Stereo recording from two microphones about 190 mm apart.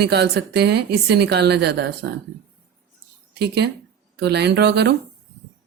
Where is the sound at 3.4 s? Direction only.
60° right (ahead or behind).